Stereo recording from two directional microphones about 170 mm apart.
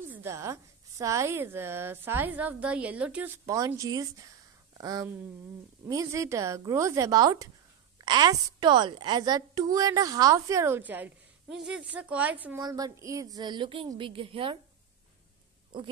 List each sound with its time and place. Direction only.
0.0 s a woman's voice: 15° right (ahead or behind)
12.5 s a woman's voice: 25° right (ahead or behind)